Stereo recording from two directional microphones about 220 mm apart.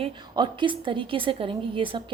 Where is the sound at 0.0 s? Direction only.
20° right (ahead or behind).